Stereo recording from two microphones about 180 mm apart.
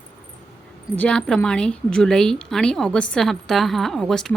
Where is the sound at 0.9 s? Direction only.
5° left (ahead or behind).